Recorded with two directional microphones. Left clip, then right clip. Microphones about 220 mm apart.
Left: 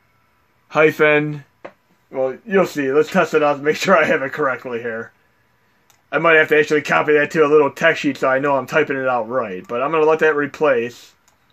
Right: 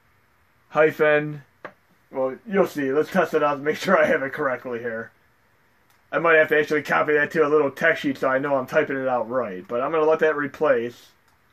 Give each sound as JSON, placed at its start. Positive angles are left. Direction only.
{"t": 0.7, "sound": "a man's voice", "side_deg": 45}
{"t": 6.0, "sound": "a man's voice", "side_deg": 40}